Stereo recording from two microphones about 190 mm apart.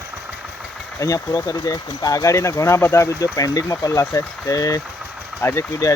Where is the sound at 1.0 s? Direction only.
20° left (ahead or behind).